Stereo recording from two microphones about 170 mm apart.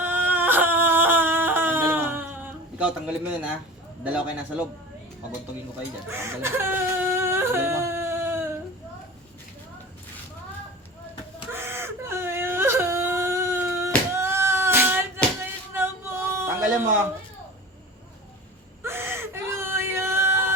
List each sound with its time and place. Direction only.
0.0 s a sound: 10° right (ahead or behind)
4.0 s a man's voice: 10° right (ahead or behind)
6.1 s whimper: 15° right (ahead or behind)
11.5 s whimper: 15° right (ahead or behind)
15.7 s a sound: 15° right (ahead or behind)
18.8 s whimper: 15° right (ahead or behind)